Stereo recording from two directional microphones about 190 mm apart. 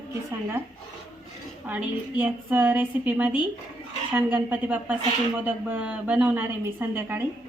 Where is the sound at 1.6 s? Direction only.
10° right (ahead or behind).